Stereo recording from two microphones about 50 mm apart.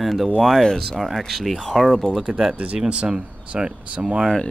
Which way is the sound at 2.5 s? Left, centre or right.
Right.